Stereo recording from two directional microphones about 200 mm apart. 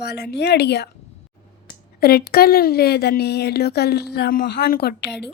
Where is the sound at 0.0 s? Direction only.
55° left (ahead or behind).